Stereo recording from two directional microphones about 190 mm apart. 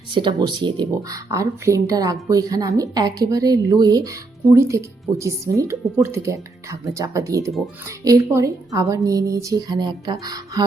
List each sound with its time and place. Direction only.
0.1 s a woman's voice: 25° right (ahead or behind)